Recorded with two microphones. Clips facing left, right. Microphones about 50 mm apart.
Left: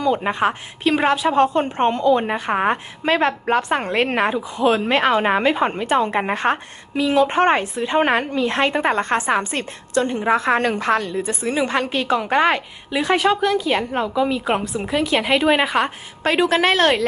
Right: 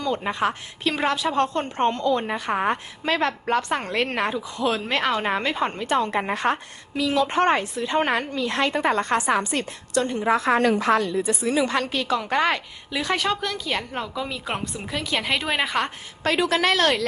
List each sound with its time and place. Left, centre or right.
0.2 s a woman's voice: left
0.9 s a woman's voice: centre
10.2 s a woman's voice: left; by 15.9 s centre
16.2 s a woman's voice: left